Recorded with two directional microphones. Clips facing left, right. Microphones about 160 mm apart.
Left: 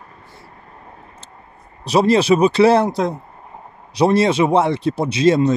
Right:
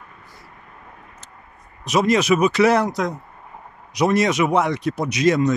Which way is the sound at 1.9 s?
30° left (ahead or behind).